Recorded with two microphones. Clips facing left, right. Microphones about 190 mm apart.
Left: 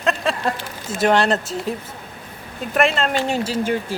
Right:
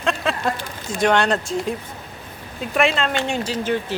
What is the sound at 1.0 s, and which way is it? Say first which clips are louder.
Speech: left 1 dB; 5° left (ahead or behind).